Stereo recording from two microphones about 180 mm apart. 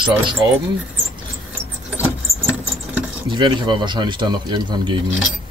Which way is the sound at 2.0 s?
10° right (ahead or behind).